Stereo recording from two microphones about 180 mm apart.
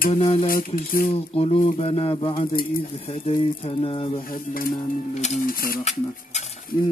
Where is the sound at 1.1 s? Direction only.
35° left (ahead or behind).